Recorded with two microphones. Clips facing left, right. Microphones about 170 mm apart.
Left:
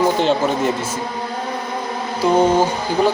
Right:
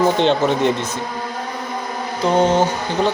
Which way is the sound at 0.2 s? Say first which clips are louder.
Right 1 dB; 5° left (ahead or behind).